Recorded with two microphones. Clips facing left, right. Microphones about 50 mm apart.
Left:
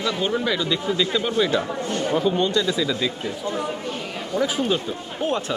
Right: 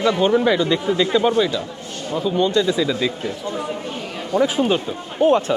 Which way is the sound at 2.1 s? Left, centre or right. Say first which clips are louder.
Right 1 dB; centre.